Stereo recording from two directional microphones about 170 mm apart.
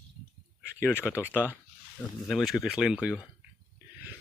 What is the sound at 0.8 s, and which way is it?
Speech, 15° left (ahead or behind).